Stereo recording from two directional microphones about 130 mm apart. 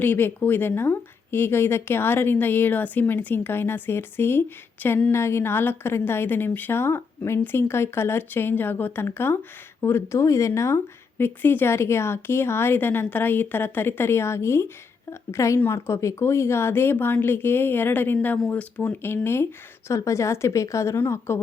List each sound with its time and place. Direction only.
0.0 s a woman's voice: 15° left (ahead or behind)